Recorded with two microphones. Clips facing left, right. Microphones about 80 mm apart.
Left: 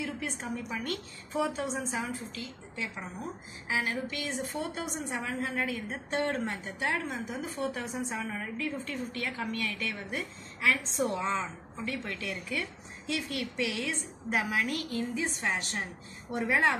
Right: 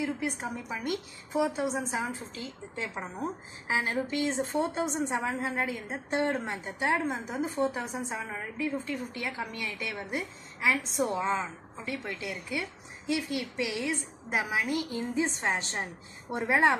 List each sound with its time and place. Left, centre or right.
0.4 s a woman's voice: centre
2.0 s a woman's voice: right